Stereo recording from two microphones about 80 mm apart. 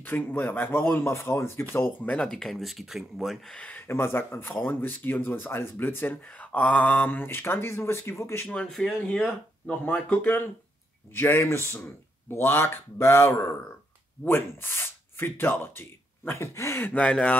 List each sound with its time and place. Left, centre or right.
0.0 s speech: left
2.2 s speech: centre
3.5 s speech: centre
3.9 s speech: left
8.5 s speech: centre; by 16.8 s left
16.8 s speech: centre